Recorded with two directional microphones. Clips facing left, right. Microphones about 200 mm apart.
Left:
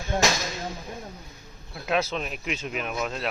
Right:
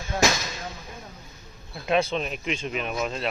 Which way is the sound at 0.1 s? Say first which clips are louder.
Right 1 dB; 25° left (ahead or behind).